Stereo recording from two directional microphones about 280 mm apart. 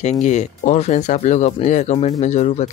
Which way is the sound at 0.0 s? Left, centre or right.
Left.